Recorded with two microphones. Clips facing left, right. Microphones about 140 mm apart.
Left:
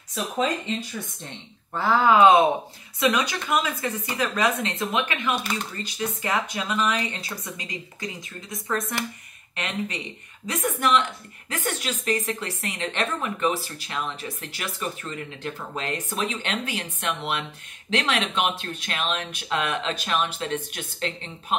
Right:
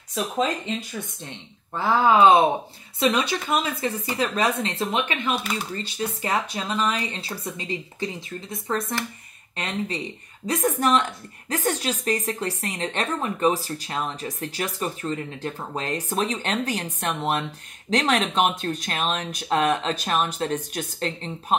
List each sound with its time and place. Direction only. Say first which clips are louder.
1.7 s a woman's voice: even; 15° right (ahead or behind)
5.4 s speech: even; 5° right (ahead or behind)
5.8 s a woman's voice: right 1 dB; 30° right (ahead or behind)